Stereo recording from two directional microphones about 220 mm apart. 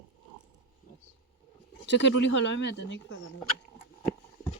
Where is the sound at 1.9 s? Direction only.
55° left (ahead or behind).